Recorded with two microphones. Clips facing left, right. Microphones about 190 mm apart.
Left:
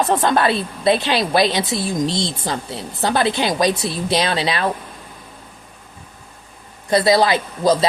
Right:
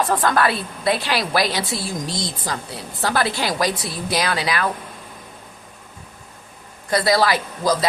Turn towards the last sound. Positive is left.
turn(degrees=20)  # may be behind; listen again after turning